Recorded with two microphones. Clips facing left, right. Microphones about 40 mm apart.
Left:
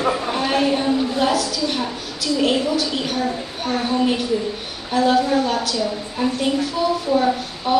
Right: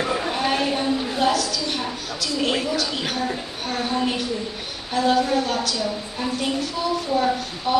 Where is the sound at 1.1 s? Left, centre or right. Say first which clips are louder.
Left 2 dB; centre.